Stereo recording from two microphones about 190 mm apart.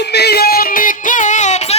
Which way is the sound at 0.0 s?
60° left (ahead or behind).